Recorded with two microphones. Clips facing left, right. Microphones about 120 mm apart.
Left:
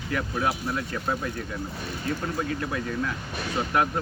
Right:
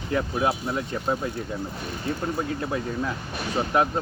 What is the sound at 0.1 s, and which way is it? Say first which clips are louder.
Speech: right 3 dB; 25° right (ahead or behind).